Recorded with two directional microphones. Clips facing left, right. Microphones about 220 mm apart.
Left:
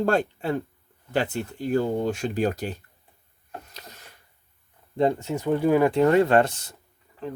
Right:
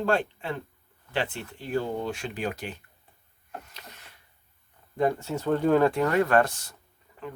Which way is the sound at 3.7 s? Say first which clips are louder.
Left 3 dB; 40° left (ahead or behind).